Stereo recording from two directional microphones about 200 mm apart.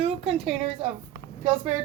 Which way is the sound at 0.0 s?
30° right (ahead or behind).